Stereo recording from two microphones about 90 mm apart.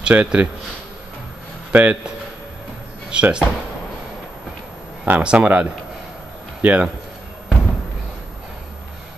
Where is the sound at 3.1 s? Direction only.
10° right (ahead or behind).